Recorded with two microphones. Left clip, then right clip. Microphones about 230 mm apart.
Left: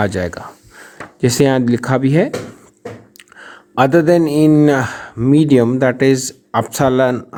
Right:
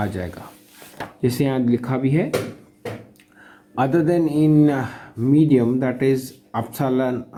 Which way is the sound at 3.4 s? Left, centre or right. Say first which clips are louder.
Left 8 dB; left.